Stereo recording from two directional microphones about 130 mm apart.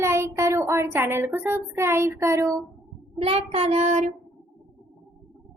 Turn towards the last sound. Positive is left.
turn(degrees=-65)  # may be behind; listen again after turning